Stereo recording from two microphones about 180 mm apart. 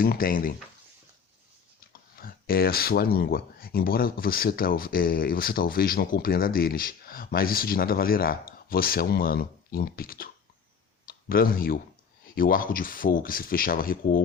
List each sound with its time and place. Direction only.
0.0 s speech: 50° left (ahead or behind)
1.9 s speech: 55° left (ahead or behind)